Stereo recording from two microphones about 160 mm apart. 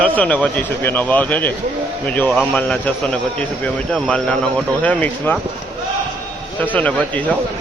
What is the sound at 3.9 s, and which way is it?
A man's voice, 5° left (ahead or behind).